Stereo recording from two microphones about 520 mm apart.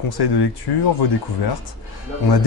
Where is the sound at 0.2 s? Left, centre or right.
Left.